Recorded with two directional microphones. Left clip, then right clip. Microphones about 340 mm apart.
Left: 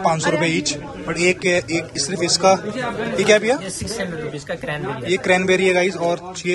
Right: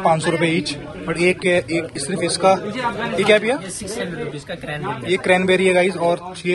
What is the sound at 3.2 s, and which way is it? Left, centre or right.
Speech, centre.